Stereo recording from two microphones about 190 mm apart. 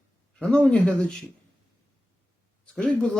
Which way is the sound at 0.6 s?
5° left (ahead or behind).